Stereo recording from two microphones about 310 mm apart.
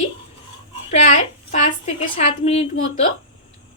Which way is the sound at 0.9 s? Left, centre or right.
Left.